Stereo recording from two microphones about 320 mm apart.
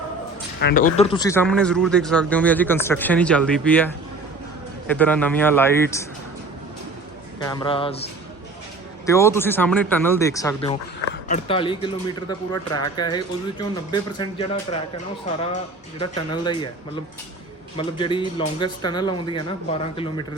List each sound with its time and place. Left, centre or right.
0.6 s speech: left; by 6.1 s centre
7.4 s speech: centre
16.0 s speech: centre
17.7 s speech: centre